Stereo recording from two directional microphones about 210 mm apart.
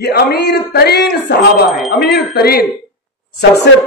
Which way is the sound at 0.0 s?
50° left (ahead or behind).